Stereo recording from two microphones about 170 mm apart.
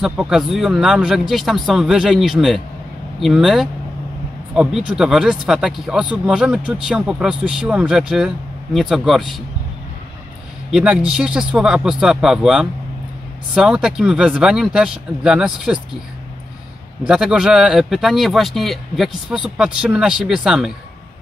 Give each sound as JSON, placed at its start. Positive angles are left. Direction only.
{"t": 0.0, "sound": "speech", "side_deg": -5}
{"t": 10.7, "sound": "a man's voice", "side_deg": -5}
{"t": 17.1, "sound": "speech", "side_deg": -5}